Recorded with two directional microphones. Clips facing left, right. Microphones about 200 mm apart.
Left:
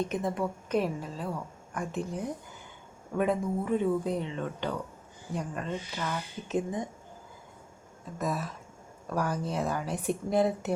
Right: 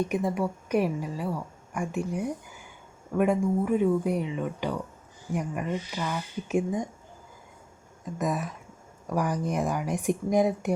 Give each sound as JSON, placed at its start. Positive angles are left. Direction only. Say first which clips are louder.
{"t": 0.0, "sound": "a woman's voice", "louder": "right 3 dB", "side_deg": -10}
{"t": 8.2, "sound": "a woman's voice", "louder": "right 3 dB", "side_deg": -15}